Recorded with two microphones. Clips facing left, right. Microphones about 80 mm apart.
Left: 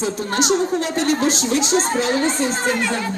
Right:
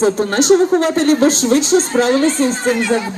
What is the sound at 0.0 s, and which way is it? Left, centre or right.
Speech, right.